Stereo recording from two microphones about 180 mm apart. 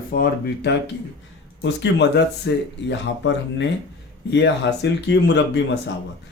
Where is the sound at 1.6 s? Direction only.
75° left (ahead or behind).